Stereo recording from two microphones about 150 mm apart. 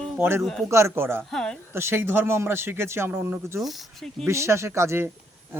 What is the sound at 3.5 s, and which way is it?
Speech, centre (ahead or behind).